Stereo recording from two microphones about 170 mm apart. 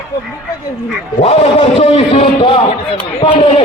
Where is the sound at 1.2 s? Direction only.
35° left (ahead or behind).